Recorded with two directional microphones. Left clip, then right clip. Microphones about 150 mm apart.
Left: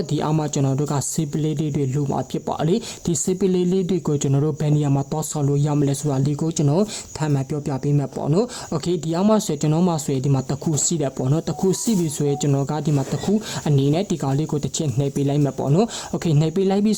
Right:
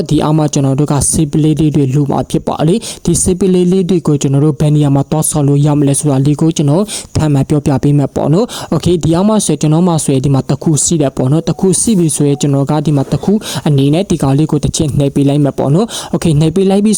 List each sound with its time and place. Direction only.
0.1 s speech: 40° right (ahead or behind)
7.2 s speech: 45° right (ahead or behind)